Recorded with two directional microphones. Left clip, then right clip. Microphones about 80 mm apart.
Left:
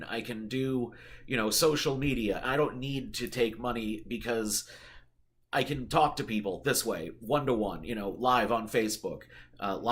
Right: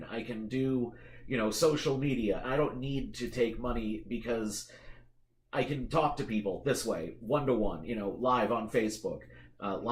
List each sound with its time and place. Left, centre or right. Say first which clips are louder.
0.1 s speech: left 1 dB; centre